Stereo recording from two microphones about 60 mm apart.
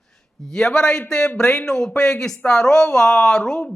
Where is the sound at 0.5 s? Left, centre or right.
Centre.